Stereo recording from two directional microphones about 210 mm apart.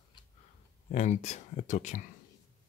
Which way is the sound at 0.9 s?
30° left (ahead or behind).